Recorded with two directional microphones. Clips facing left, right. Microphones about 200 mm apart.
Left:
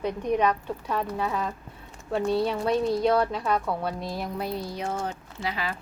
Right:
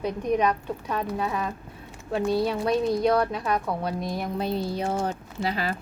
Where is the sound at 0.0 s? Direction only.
15° right (ahead or behind).